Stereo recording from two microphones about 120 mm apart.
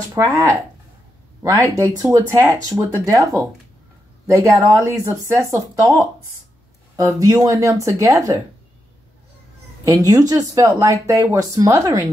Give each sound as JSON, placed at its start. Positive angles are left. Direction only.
{"t": 0.1, "sound": "speech", "side_deg": -25}
{"t": 1.6, "sound": "speech", "side_deg": -25}
{"t": 9.8, "sound": "speech", "side_deg": -30}